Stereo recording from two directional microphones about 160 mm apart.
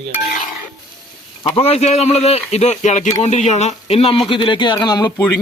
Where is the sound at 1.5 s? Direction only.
40° left (ahead or behind).